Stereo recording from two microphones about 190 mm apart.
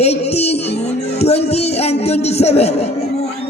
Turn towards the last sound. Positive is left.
turn(degrees=35)  # may be behind; listen again after turning